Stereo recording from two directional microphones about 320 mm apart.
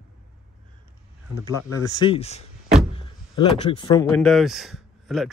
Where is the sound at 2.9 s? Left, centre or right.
Centre.